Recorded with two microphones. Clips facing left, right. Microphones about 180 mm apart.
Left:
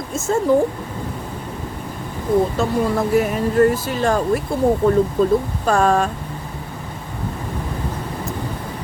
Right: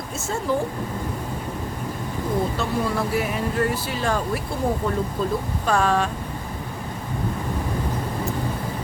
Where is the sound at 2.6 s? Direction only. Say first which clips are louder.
Left 5 dB; 45° left (ahead or behind).